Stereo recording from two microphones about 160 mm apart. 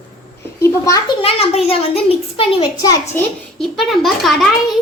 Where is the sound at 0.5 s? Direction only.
20° left (ahead or behind).